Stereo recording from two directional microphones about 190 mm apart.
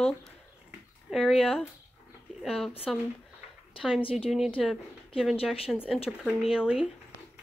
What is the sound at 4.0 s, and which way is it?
Speech, 30° left (ahead or behind).